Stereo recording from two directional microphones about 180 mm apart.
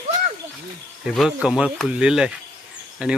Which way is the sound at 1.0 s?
Centre (ahead or behind).